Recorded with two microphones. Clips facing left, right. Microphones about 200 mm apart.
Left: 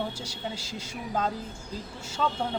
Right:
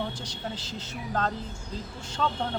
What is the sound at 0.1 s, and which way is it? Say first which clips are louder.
Speech: even; 10° left (ahead or behind).